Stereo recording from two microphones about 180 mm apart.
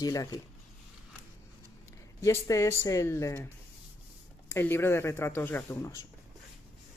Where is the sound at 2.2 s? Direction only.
15° left (ahead or behind).